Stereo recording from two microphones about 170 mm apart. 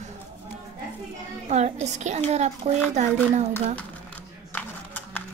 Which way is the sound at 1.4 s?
40° right (ahead or behind).